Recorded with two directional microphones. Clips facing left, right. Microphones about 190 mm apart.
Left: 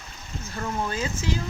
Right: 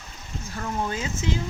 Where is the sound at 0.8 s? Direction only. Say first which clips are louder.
Right 1 dB; 20° right (ahead or behind).